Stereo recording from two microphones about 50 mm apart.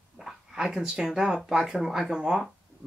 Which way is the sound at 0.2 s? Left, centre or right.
Centre.